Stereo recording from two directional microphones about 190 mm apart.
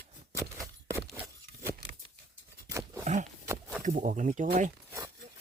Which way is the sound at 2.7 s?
15° right (ahead or behind).